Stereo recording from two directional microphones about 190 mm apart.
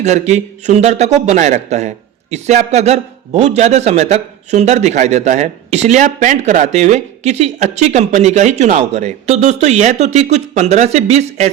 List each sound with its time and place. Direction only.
0.0 s a man's voice: 35° right (ahead or behind)